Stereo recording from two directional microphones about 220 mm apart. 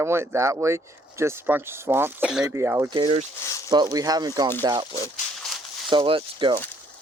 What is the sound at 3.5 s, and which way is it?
Speech, 15° left (ahead or behind).